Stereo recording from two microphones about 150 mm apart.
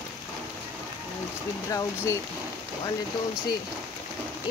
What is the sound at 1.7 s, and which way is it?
Speech, 20° left (ahead or behind).